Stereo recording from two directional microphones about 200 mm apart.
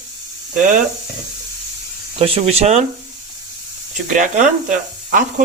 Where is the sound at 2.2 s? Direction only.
30° right (ahead or behind).